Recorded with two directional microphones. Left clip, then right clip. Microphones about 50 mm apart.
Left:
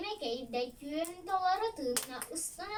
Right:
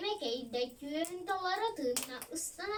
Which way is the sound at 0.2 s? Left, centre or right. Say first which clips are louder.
Even; left.